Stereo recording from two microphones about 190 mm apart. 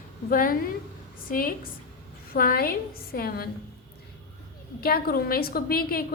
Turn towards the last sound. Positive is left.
turn(degrees=50)  # may be behind; listen again after turning